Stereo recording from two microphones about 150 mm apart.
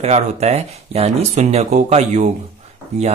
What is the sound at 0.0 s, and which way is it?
Speech, 50° right (ahead or behind).